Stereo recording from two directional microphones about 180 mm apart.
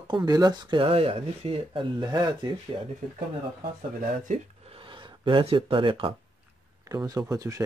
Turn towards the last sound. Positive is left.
turn(degrees=-20)  # may be behind; listen again after turning